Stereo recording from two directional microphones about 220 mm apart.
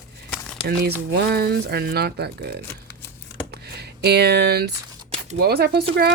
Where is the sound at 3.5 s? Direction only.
50° right (ahead or behind).